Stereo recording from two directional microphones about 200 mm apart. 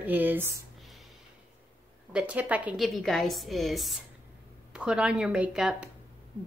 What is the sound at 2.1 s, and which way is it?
Speech, 5° right (ahead or behind).